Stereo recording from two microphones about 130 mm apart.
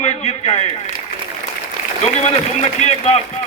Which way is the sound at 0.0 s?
60° left (ahead or behind).